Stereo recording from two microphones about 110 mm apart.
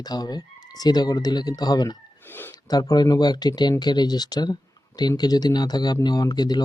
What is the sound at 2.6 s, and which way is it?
Speech, 35° left (ahead or behind).